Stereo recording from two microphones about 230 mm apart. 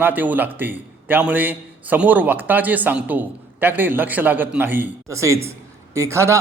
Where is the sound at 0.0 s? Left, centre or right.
Centre.